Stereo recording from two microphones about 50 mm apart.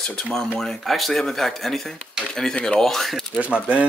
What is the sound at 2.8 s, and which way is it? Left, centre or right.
Speech, centre.